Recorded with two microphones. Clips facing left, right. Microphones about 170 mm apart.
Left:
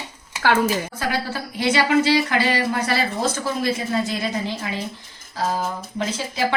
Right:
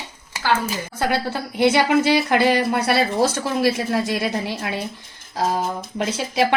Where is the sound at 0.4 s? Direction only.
65° left (ahead or behind).